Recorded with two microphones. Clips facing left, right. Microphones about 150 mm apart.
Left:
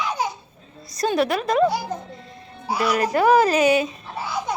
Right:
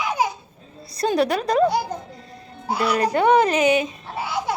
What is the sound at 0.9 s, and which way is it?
Speech, 30° right (ahead or behind).